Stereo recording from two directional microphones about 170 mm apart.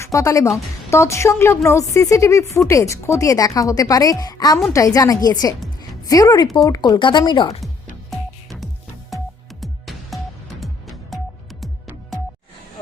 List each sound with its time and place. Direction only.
0.0 s speech: 20° left (ahead or behind)
8.1 s music: centre (ahead or behind)